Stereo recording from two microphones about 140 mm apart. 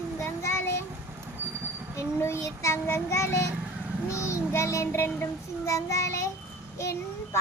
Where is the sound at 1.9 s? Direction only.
20° left (ahead or behind).